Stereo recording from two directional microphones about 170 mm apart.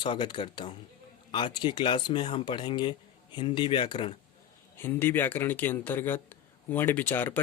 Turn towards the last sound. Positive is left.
turn(degrees=10)  # may be behind; listen again after turning